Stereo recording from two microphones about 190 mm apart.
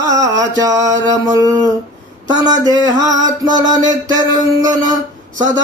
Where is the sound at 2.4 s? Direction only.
20° right (ahead or behind).